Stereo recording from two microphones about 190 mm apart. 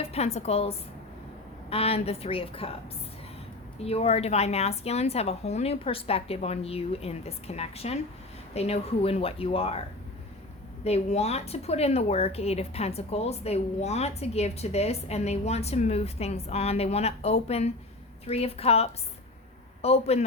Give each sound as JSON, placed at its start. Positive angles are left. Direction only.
{"t": 0.0, "sound": "a woman's voice", "side_deg": 35}
{"t": 3.8, "sound": "speech", "side_deg": 30}
{"t": 10.8, "sound": "speech", "side_deg": 35}